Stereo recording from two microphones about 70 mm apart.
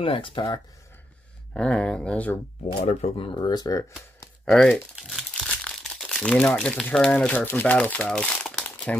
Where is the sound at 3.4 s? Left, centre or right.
Left.